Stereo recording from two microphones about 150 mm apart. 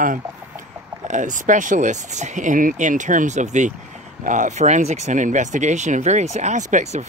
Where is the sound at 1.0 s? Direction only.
55° right (ahead or behind).